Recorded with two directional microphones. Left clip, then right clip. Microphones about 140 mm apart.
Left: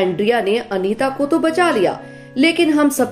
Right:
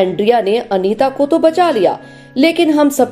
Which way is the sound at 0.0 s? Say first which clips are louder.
Right 4 dB; 25° right (ahead or behind).